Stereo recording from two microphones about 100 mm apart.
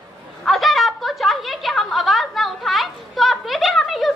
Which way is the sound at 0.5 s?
Centre (ahead or behind).